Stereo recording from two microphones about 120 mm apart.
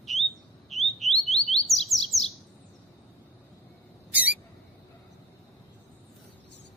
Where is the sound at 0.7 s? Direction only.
Centre (ahead or behind).